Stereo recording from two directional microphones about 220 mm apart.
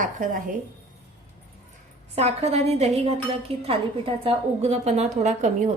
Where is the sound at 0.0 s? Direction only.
35° right (ahead or behind).